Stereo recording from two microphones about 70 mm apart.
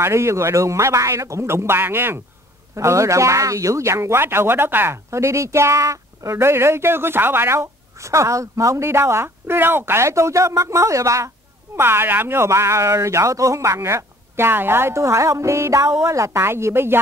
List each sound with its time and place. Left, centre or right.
0.0 s speech: right
2.7 s speech: right